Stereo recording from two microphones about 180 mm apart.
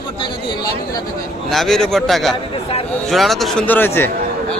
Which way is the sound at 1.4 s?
Centre (ahead or behind).